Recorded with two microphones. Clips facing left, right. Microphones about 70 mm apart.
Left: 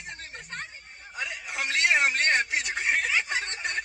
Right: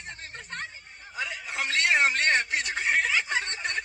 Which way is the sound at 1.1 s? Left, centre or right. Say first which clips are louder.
Right 1 dB; centre.